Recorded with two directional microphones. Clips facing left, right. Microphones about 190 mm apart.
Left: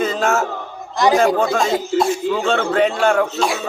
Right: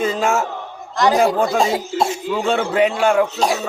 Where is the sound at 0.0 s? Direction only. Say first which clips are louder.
Even; 10° right (ahead or behind).